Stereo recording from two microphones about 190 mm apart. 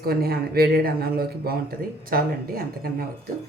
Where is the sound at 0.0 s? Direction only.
55° right (ahead or behind).